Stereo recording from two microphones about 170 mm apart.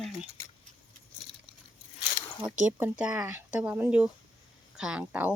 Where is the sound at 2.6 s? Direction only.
10° right (ahead or behind).